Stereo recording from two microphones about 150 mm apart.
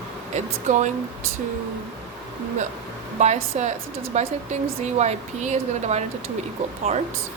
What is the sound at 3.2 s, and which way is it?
Speech, 50° right (ahead or behind).